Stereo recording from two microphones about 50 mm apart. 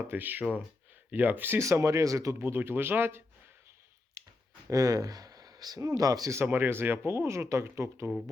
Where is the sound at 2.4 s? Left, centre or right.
Right.